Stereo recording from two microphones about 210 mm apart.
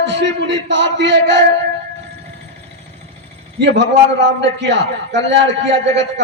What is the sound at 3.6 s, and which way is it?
A man's voice, 55° right (ahead or behind).